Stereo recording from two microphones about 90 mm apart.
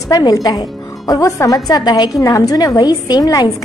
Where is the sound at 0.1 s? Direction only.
45° left (ahead or behind).